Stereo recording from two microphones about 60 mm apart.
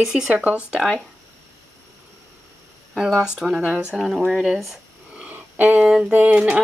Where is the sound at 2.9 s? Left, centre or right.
Centre.